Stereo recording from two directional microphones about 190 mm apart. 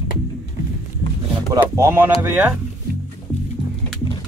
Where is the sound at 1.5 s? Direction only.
15° right (ahead or behind).